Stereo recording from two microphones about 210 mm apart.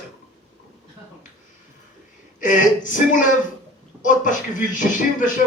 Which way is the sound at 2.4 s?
40° left (ahead or behind).